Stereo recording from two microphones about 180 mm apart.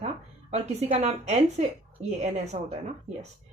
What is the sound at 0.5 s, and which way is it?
A woman's voice, 35° right (ahead or behind).